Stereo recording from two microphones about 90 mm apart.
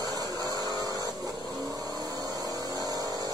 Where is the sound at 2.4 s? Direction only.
45° right (ahead or behind).